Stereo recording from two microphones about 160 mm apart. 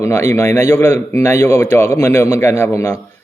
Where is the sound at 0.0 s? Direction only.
15° left (ahead or behind).